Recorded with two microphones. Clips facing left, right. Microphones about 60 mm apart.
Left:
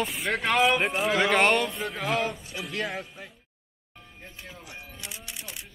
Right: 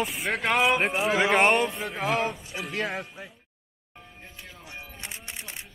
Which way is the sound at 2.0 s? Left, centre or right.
Right.